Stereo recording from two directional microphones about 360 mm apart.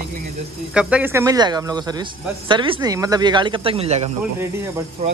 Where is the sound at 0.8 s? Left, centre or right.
Centre.